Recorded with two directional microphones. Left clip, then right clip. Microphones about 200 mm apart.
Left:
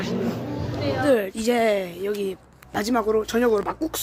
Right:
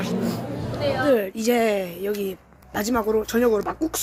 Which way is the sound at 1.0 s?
Centre (ahead or behind).